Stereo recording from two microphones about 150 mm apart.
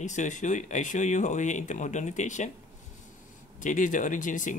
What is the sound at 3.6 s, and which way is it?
Speech, 60° left (ahead or behind).